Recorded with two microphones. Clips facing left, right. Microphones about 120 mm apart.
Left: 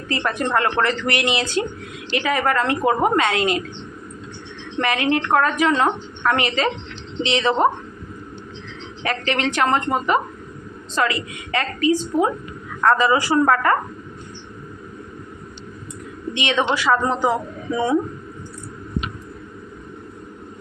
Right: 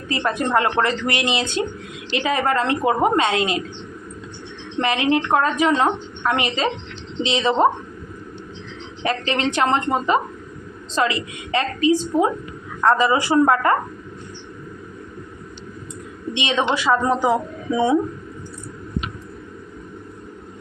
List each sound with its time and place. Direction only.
0.1 s a woman's voice: 20° right (ahead or behind)
4.8 s a woman's voice: 25° right (ahead or behind)
9.0 s a woman's voice: 25° right (ahead or behind)
16.3 s a woman's voice: 20° right (ahead or behind)